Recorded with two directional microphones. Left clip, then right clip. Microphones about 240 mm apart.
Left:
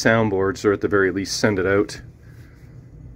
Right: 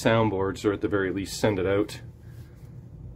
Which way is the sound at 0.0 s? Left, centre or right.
Centre.